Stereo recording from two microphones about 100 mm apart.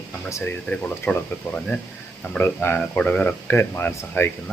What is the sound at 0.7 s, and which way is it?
Speech, 10° left (ahead or behind).